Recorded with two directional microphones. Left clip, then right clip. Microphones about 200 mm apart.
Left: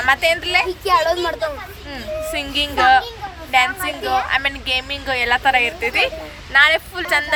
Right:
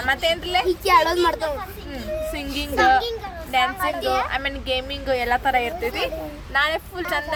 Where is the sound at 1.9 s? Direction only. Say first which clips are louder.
Left 4 dB; 10° right (ahead or behind).